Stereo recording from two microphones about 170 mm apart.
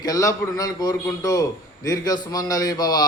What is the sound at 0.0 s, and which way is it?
A man's voice, 20° left (ahead or behind).